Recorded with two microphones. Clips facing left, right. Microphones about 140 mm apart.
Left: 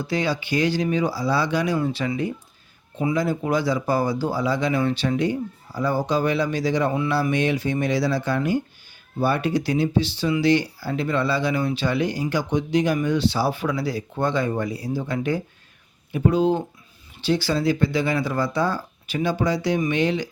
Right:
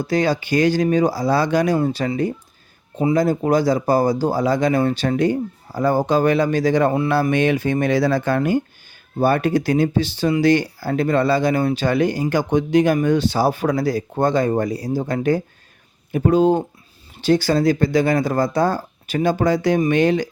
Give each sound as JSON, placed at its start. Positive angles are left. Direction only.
{"t": 0.0, "sound": "speech", "side_deg": -45}